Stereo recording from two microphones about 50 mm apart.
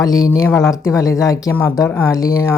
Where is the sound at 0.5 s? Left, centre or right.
Left.